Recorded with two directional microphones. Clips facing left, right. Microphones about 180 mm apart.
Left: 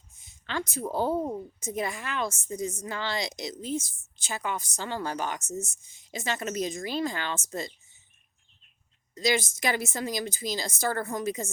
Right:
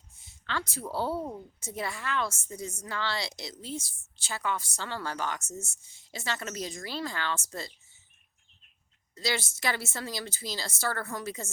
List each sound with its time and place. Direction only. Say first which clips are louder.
0.2 s a woman's voice: left 2 dB; 15° left (ahead or behind)
9.1 s a woman's voice: left 6 dB; 15° left (ahead or behind)